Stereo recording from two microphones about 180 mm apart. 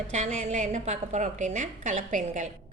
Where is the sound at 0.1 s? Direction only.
40° right (ahead or behind).